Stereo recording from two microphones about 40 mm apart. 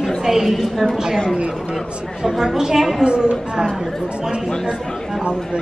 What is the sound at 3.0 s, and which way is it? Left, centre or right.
Speech, right.